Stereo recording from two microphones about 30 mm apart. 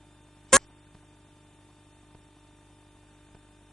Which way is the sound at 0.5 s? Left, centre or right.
Centre.